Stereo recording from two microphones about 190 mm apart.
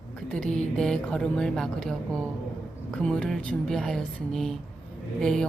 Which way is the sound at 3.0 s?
5° left (ahead or behind).